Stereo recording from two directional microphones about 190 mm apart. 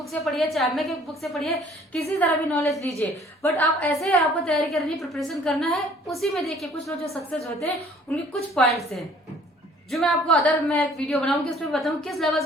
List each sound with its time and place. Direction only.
0.1 s a woman's voice: centre (ahead or behind)